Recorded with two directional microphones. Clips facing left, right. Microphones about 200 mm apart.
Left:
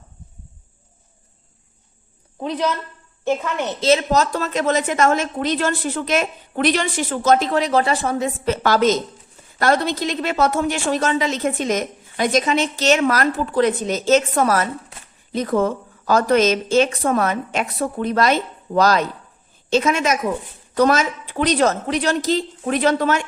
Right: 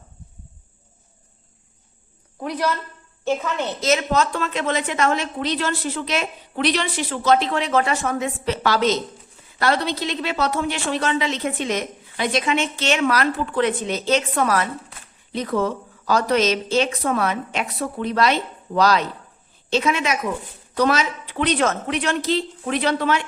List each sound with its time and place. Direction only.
2.4 s a man's voice: 20° left (ahead or behind)
3.8 s a woman's voice: 30° left (ahead or behind)
8.4 s a woman's voice: 45° left (ahead or behind)